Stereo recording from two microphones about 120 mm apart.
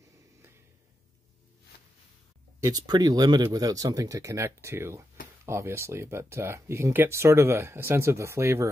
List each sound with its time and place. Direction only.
2.6 s speech: 30° right (ahead or behind)